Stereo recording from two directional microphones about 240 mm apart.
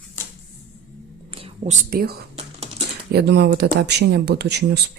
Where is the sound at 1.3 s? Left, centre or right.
Right.